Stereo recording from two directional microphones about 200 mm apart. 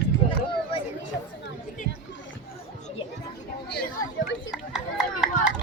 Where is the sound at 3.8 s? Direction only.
60° left (ahead or behind).